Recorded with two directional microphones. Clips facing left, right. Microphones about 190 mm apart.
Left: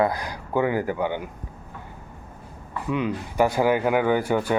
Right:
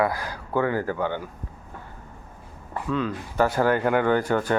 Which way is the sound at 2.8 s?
15° left (ahead or behind).